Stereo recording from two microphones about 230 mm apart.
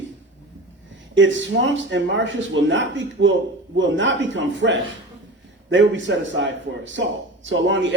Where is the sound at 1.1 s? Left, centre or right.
Right.